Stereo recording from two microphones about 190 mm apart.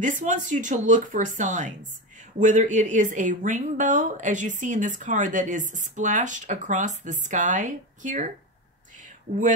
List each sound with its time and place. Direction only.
0.2 s speech: 40° right (ahead or behind)